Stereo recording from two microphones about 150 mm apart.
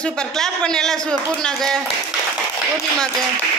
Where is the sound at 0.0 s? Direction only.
5° left (ahead or behind).